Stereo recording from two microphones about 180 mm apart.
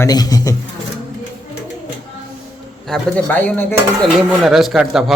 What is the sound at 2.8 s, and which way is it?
Speech, 5° left (ahead or behind).